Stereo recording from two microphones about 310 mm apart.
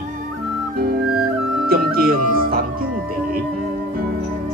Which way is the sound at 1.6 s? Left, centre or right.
Right.